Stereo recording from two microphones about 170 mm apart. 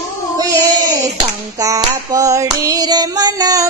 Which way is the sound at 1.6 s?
20° right (ahead or behind).